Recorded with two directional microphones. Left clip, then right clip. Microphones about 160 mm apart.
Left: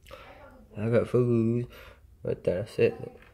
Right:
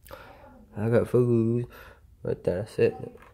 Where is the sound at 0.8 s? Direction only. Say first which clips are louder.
Right 2 dB; 25° right (ahead or behind).